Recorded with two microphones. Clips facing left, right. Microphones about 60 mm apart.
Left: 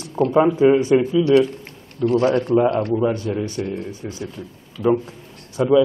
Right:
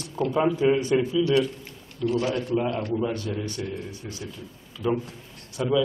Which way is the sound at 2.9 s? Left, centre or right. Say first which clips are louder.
Left 7 dB; left.